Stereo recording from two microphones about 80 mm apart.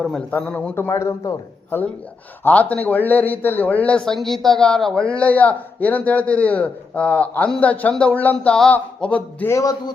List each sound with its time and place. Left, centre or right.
0.3 s a man's voice: left
0.7 s a man's voice: left
2.4 s a man's voice: centre
4.0 s a man's voice: centre
9.5 s a man's voice: left